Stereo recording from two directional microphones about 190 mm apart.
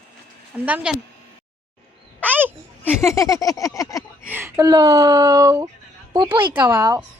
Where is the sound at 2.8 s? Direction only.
15° left (ahead or behind).